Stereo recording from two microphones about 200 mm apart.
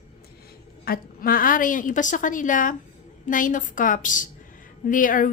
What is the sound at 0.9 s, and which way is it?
A woman's voice, 45° left (ahead or behind).